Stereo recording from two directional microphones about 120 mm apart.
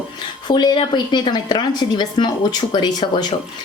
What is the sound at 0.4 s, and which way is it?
Speech, 40° left (ahead or behind).